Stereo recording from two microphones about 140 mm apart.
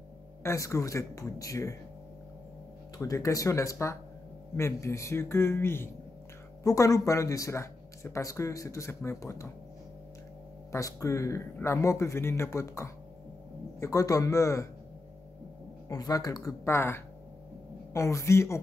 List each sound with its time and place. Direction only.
0.4 s speech: 20° left (ahead or behind)
3.0 s speech: 20° left (ahead or behind)
10.7 s speech: 20° left (ahead or behind)
15.9 s speech: 25° left (ahead or behind)